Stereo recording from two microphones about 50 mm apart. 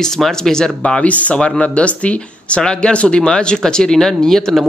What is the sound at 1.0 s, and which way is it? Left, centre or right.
Speech, left.